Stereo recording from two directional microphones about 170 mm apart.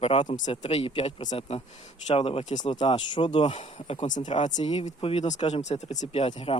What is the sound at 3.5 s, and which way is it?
Speech, 45° left (ahead or behind).